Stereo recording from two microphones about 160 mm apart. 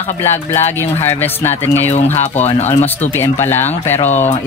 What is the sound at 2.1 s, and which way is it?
Speech, 45° left (ahead or behind).